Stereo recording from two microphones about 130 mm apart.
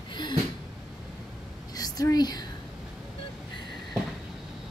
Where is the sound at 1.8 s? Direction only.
30° left (ahead or behind).